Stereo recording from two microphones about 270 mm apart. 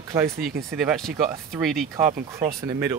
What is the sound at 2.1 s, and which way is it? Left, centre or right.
Speech, right.